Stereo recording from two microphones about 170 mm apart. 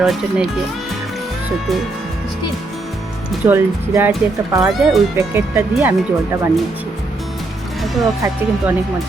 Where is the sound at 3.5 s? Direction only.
10° right (ahead or behind).